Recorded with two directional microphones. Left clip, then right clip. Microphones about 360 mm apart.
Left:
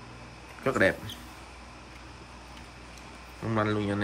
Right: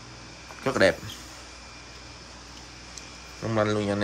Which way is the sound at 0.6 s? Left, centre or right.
Centre.